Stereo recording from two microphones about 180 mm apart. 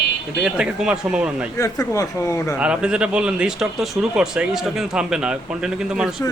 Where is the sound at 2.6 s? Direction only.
5° right (ahead or behind).